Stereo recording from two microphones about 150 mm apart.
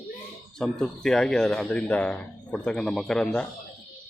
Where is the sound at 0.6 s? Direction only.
5° left (ahead or behind).